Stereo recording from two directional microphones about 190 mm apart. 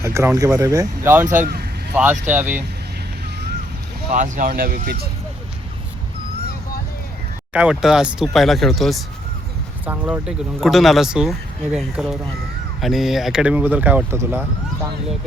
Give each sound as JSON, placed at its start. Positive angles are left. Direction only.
{"t": 0.0, "sound": "speech", "side_deg": -15}
{"t": 1.3, "sound": "speech", "side_deg": -50}
{"t": 2.2, "sound": "speech", "side_deg": -10}
{"t": 4.1, "sound": "speech", "side_deg": -45}
{"t": 7.5, "sound": "speech", "side_deg": -5}